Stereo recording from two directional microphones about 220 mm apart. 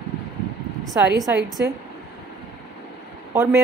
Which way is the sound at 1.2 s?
15° right (ahead or behind).